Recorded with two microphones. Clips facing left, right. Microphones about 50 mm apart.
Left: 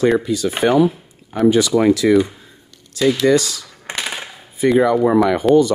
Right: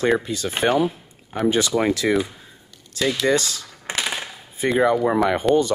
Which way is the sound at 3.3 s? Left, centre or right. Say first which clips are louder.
Left 5 dB; right.